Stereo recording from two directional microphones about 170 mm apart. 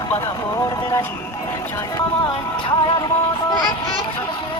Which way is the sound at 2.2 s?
25° left (ahead or behind).